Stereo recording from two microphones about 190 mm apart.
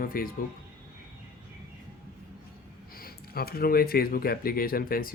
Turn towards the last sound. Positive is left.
turn(degrees=50)  # may be behind; listen again after turning